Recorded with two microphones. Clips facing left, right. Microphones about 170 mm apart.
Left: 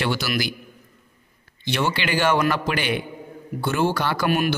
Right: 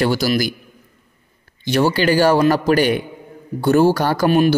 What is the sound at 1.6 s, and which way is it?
A man's voice, 40° right (ahead or behind).